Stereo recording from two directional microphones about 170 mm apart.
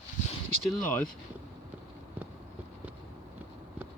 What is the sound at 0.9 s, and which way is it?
Speech, 10° left (ahead or behind).